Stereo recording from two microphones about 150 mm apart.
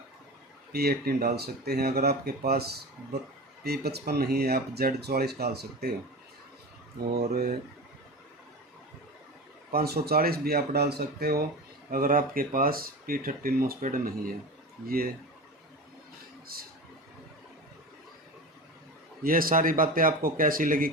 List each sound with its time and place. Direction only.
0.7 s speech: 90° right
7.1 s speech: 90° right
9.7 s speech: 90° right
11.9 s speech: 70° right (ahead or behind)
16.5 s speech: 85° right
19.2 s speech: 70° right (ahead or behind)